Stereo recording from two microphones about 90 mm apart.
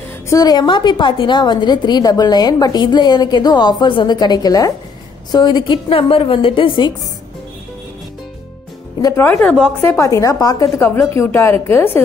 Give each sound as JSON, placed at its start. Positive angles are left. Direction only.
{"t": 0.3, "sound": "a woman's voice", "side_deg": 45}
{"t": 9.1, "sound": "a woman's voice", "side_deg": 25}
{"t": 9.9, "sound": "a woman's voice", "side_deg": 35}